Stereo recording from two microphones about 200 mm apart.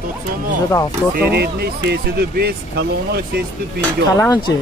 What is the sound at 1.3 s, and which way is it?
Speech, 50° right (ahead or behind).